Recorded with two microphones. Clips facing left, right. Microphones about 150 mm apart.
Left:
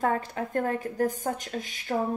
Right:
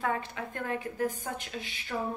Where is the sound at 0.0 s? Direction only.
40° left (ahead or behind).